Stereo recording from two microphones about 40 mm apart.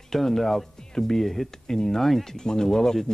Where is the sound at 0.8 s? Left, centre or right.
Centre.